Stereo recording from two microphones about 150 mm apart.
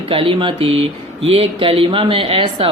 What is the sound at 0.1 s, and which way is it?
Speech, 35° right (ahead or behind).